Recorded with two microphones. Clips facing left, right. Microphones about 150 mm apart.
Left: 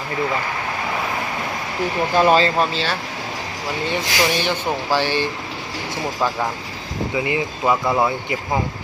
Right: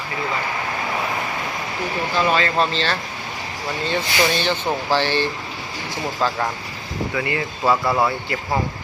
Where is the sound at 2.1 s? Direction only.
45° left (ahead or behind).